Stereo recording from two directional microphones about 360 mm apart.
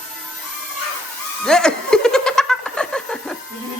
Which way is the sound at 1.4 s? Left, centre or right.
Centre.